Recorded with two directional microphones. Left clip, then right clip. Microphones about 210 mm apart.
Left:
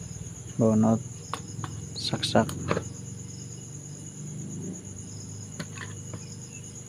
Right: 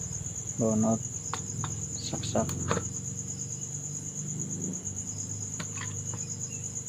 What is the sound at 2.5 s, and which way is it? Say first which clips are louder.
Speech: left 2 dB; 15° left (ahead or behind).